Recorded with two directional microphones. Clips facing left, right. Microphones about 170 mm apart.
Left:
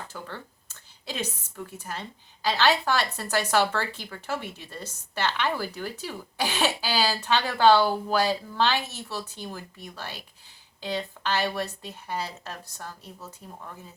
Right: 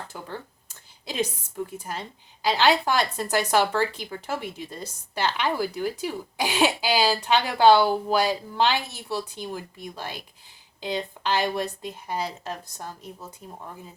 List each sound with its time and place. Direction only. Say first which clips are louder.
0.1 s a woman's voice: right 2 dB; 15° right (ahead or behind)